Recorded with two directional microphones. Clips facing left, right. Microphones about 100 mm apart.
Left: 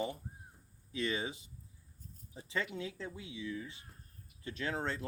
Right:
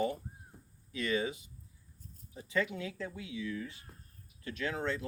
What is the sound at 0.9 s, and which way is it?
Speech, 25° left (ahead or behind).